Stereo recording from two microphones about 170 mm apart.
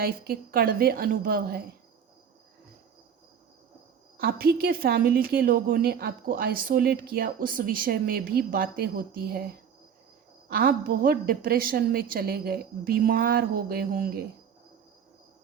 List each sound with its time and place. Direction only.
0.0 s a woman's voice: 60° right (ahead or behind)
4.2 s a woman's voice: 65° right (ahead or behind)
10.5 s a woman's voice: 60° right (ahead or behind)